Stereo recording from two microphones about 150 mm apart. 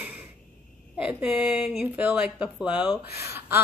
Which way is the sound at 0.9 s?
10° right (ahead or behind).